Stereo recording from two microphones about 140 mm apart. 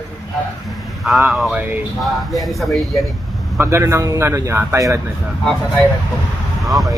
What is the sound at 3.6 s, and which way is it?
A man's voice, 20° right (ahead or behind).